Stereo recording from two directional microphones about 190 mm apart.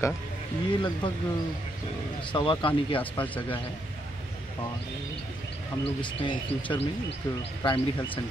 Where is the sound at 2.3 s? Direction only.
25° left (ahead or behind).